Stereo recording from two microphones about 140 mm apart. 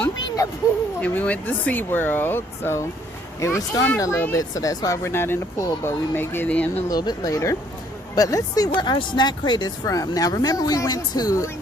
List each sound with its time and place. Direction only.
1.0 s speech: 10° left (ahead or behind)
6.8 s speech: 30° left (ahead or behind)